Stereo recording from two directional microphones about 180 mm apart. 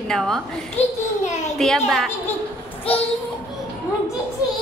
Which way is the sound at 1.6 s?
Centre (ahead or behind).